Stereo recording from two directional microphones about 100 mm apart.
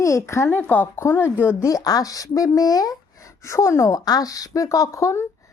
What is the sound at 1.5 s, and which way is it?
Speech, 35° left (ahead or behind).